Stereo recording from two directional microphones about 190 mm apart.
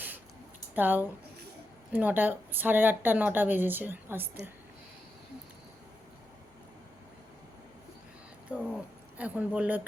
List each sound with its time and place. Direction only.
0.8 s speech: 10° right (ahead or behind)
8.5 s a sound: 5° right (ahead or behind)
9.1 s speech: 5° right (ahead or behind)